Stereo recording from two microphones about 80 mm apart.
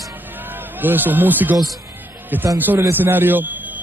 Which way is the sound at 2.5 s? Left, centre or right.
Right.